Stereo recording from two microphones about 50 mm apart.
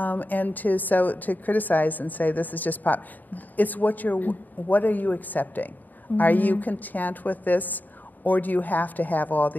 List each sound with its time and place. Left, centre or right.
0.0 s a woman's voice: left